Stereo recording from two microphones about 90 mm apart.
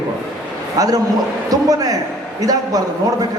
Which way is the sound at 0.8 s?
45° right (ahead or behind).